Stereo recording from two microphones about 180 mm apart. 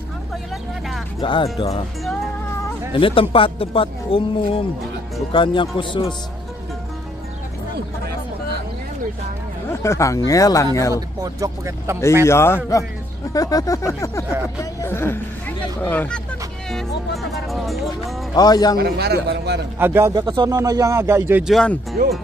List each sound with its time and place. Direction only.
1.2 s speech: 30° left (ahead or behind)
2.9 s speech: 30° left (ahead or behind)
9.7 s speech: 15° left (ahead or behind)
11.2 s speech: 20° right (ahead or behind)
12.3 s speech: 15° left (ahead or behind)
18.3 s speech: 20° left (ahead or behind)
18.8 s a man's voice: 60° right (ahead or behind)
19.8 s speech: 15° right (ahead or behind)